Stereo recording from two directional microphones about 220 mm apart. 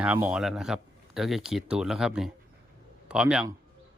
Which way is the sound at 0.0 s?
5° right (ahead or behind).